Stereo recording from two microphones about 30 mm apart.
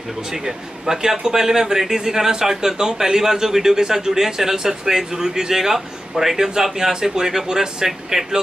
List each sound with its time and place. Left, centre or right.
0.3 s speech: centre